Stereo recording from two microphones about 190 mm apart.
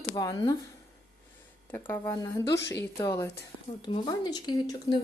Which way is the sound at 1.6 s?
10° left (ahead or behind).